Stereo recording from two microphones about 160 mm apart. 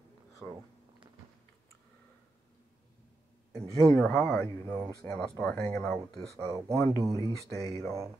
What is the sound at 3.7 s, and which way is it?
Speech, 5° left (ahead or behind).